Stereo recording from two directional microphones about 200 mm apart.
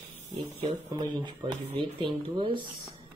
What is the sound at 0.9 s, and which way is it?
Speech, 25° right (ahead or behind).